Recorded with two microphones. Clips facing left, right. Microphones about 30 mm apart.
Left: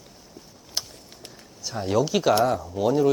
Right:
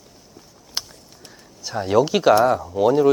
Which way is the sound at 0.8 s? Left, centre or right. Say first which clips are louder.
Right 2 dB; right.